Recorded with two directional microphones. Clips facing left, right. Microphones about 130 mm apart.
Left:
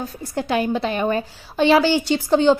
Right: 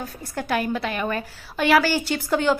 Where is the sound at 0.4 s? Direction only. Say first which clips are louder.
Left 4 dB; 25° left (ahead or behind).